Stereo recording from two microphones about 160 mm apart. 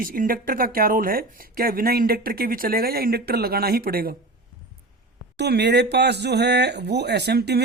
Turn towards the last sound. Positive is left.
turn(degrees=-90)